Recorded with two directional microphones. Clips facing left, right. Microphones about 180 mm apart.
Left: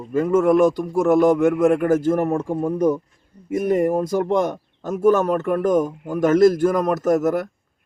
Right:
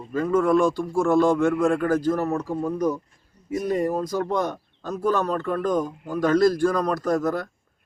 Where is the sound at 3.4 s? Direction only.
55° left (ahead or behind).